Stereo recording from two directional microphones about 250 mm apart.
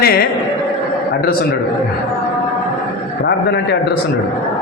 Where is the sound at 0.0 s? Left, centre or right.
Left.